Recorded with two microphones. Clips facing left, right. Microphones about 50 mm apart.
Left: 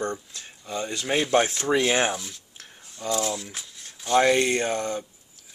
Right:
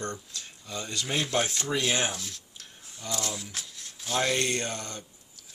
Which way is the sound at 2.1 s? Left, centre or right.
Centre.